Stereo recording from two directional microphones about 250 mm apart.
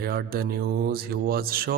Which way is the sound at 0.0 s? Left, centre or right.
Right.